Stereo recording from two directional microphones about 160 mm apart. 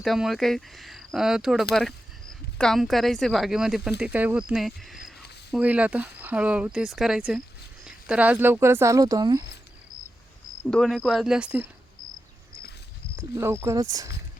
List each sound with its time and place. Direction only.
0.0 s speech: centre (ahead or behind); by 9.4 s 25° right (ahead or behind)
10.7 s speech: centre (ahead or behind)
13.1 s speech: 15° right (ahead or behind)